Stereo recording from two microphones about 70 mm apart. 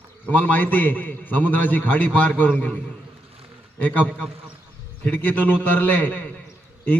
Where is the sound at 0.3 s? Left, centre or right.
Left.